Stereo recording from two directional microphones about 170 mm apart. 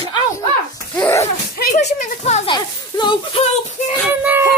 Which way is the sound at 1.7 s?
40° left (ahead or behind).